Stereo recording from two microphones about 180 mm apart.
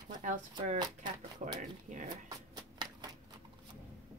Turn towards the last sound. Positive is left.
turn(degrees=-20)  # may be behind; listen again after turning